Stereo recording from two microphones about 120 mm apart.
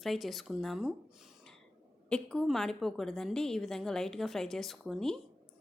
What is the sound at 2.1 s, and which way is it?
A woman's voice, 5° left (ahead or behind).